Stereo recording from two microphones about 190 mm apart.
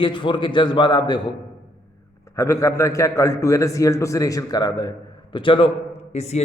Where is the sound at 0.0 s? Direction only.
25° left (ahead or behind).